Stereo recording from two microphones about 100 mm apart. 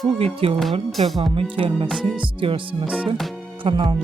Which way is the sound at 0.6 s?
Centre (ahead or behind).